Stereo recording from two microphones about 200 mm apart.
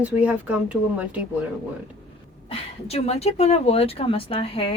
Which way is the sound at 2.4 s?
30° left (ahead or behind).